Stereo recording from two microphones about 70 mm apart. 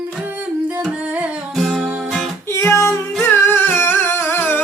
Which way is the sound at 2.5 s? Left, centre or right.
Left.